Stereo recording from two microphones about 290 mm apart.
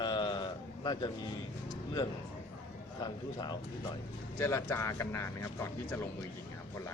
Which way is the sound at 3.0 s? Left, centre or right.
Centre.